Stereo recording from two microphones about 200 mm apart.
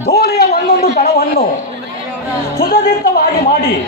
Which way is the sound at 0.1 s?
50° left (ahead or behind).